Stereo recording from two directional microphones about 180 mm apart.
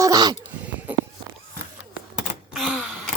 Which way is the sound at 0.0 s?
20° right (ahead or behind).